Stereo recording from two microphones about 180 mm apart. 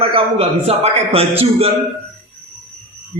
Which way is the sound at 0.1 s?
30° right (ahead or behind).